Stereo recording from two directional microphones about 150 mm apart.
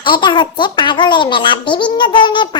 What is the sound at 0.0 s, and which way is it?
A child's voice, 30° left (ahead or behind).